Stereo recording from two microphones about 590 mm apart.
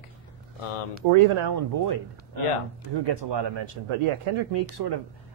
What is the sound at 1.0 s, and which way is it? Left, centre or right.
Speech, right.